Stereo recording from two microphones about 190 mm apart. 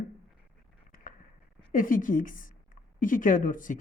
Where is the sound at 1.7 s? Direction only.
45° left (ahead or behind).